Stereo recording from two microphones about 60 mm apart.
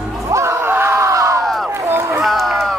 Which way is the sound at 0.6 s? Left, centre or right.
Right.